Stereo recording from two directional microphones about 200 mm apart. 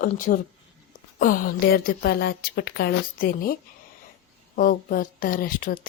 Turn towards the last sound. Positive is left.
turn(degrees=45)  # may be behind; listen again after turning